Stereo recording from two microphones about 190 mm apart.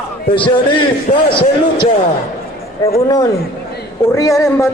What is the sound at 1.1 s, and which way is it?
Speech, 35° left (ahead or behind).